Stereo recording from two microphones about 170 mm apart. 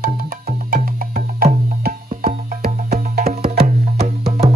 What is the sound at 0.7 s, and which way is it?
Music, 60° right (ahead or behind).